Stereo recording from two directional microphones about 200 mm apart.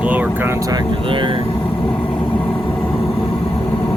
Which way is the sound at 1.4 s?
25° left (ahead or behind).